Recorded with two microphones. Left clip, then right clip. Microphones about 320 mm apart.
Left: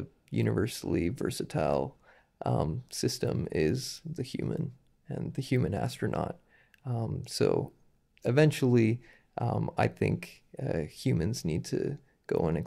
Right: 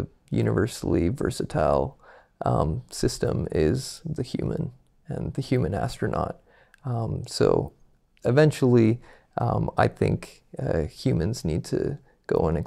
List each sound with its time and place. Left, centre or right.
0.3 s speech: right